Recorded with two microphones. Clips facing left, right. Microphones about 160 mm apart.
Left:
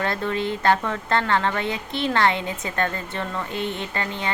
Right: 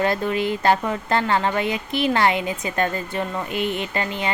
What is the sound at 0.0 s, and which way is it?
A woman's voice, 15° right (ahead or behind).